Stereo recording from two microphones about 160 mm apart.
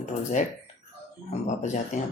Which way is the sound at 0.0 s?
50° left (ahead or behind).